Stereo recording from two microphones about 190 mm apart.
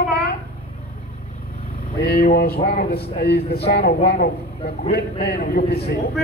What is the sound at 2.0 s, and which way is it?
A man's voice, 55° left (ahead or behind).